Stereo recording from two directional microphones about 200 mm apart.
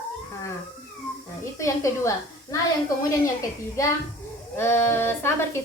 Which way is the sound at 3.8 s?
15° left (ahead or behind).